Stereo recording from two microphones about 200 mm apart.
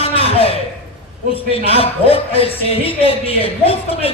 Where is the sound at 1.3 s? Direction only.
30° left (ahead or behind).